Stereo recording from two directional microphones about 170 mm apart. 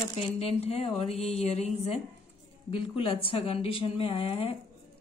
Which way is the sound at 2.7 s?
35° left (ahead or behind).